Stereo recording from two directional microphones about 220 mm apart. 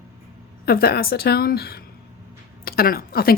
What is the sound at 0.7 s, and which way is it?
Speech, 45° left (ahead or behind).